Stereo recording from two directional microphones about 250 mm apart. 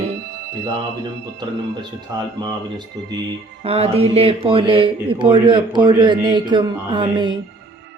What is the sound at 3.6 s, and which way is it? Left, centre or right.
Speech, right.